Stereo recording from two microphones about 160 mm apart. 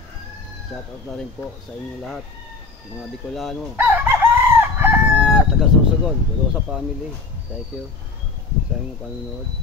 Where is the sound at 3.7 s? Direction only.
10° right (ahead or behind).